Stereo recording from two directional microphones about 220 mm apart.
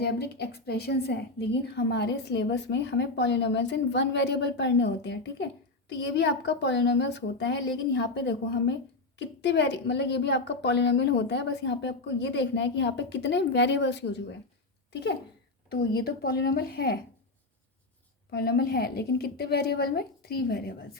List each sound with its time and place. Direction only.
0.0 s a woman's voice: 50° left (ahead or behind)
15.7 s a woman's voice: 45° left (ahead or behind)
18.3 s a woman's voice: 45° left (ahead or behind)